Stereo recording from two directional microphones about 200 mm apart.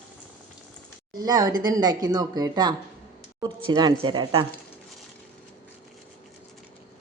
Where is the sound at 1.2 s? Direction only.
20° right (ahead or behind).